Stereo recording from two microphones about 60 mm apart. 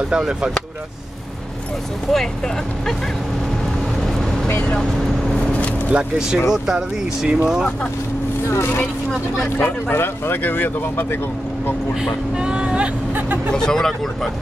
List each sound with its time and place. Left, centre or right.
0.1 s speech: centre
2.1 s speech: centre
4.1 s vehicle: centre
4.5 s speech: left
4.7 s speech: centre
5.9 s speech: centre
8.5 s speech: left
11.9 s speech: centre
13.6 s speech: centre